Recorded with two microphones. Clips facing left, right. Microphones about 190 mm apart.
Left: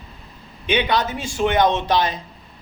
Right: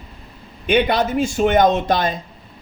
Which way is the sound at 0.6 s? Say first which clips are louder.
Right 4 dB; 55° right (ahead or behind).